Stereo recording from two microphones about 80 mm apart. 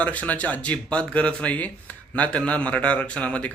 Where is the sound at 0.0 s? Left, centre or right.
Centre.